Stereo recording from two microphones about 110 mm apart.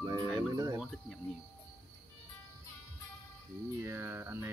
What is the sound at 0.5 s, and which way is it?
Speech, 30° right (ahead or behind).